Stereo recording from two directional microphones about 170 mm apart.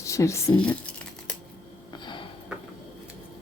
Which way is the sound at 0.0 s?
15° left (ahead or behind).